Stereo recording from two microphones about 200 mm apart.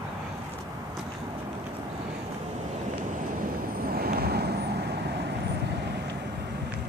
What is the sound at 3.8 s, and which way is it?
Vehicle, 50° right (ahead or behind).